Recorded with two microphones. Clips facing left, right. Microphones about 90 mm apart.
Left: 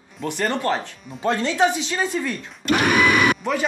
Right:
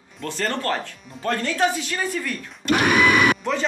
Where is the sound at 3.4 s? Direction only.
5° left (ahead or behind).